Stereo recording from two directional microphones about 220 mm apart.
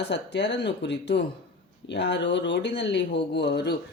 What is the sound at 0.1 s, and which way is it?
Speech, 50° left (ahead or behind).